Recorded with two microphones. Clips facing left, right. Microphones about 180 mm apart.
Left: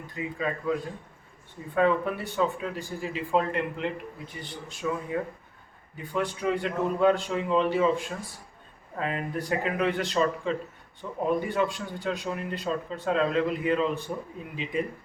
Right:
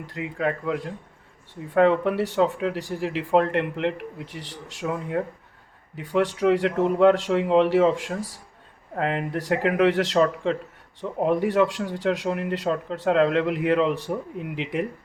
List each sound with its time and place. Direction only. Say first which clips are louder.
0.0 s speech: right 4 dB; 80° right
6.0 s speech: right 7 dB; 90° right
9.0 s speech: right 5 dB; 75° right (ahead or behind)